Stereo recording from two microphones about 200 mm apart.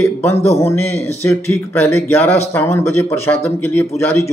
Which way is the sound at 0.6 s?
10° left (ahead or behind).